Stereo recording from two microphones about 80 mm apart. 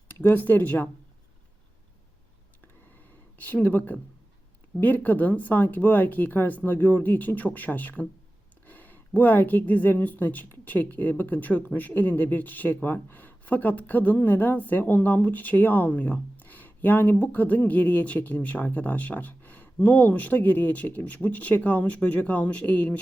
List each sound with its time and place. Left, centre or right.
0.1 s speech: left
3.0 s a sound: left
5.0 s a woman's voice: left